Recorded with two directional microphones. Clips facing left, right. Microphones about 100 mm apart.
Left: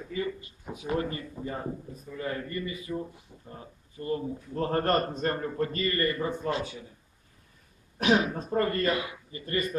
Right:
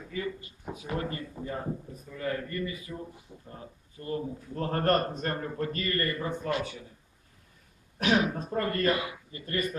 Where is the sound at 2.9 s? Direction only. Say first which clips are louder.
Left 6 dB; 10° left (ahead or behind).